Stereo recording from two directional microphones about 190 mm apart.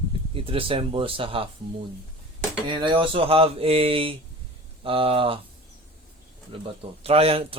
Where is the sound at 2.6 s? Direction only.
25° right (ahead or behind).